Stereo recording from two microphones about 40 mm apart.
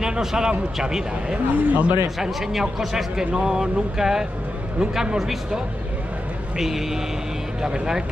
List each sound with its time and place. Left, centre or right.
0.0 s speech: centre
1.3 s a man's voice: right
2.1 s speech: centre
6.6 s speech: centre